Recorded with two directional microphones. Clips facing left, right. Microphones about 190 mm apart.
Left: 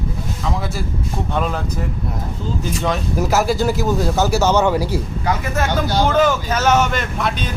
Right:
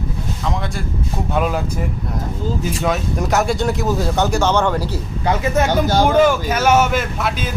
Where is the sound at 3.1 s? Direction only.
Centre (ahead or behind).